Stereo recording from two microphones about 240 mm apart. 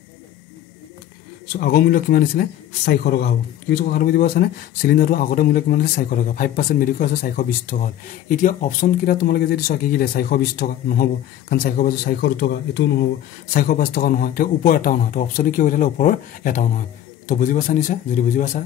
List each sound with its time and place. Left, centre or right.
1.5 s speech: left